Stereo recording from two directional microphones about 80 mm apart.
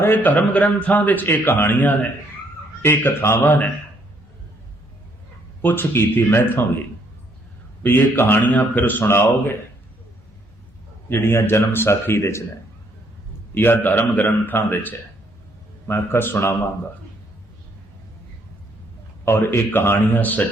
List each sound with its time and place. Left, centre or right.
0.0 s a man's voice: left
5.6 s a man's voice: left
7.8 s a man's voice: left
11.1 s speech: left
13.5 s a man's voice: left
19.2 s a man's voice: left